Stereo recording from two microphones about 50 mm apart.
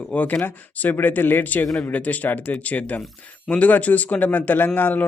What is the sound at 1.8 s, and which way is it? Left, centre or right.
A man's voice, left.